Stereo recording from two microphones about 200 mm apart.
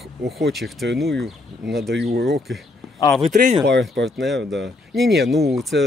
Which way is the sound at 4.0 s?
Centre (ahead or behind).